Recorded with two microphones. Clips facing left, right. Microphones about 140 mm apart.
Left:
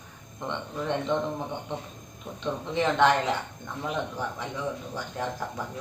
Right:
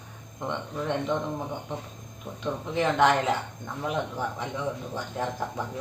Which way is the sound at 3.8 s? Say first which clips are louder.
Right 2 dB; 15° right (ahead or behind).